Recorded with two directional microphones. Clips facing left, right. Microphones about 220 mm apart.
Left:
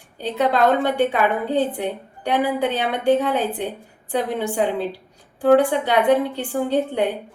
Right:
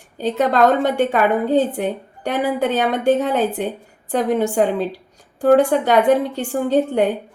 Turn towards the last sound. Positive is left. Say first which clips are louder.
# right 3 dB
turn(degrees=-45)  # may be behind; listen again after turning